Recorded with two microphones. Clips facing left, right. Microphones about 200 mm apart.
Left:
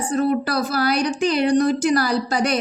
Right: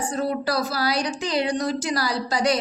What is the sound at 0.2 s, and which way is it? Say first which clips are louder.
A woman's voice: left 4 dB; 55° left (ahead or behind).